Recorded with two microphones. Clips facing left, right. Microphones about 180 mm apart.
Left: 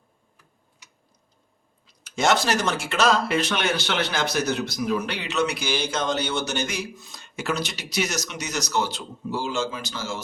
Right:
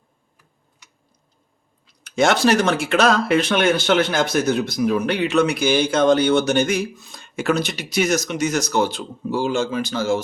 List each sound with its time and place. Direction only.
2.0 s speech: 60° right (ahead or behind)